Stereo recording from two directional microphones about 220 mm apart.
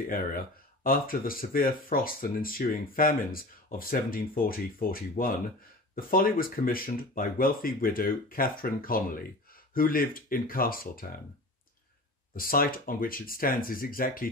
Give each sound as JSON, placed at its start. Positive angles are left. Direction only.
{"t": 0.8, "sound": "speech", "side_deg": 40}
{"t": 12.4, "sound": "speech", "side_deg": 40}